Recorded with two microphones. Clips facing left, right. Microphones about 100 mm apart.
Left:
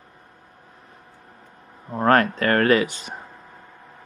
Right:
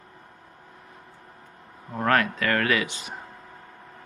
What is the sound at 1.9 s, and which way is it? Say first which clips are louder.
Speech: left 5 dB; 35° left (ahead or behind).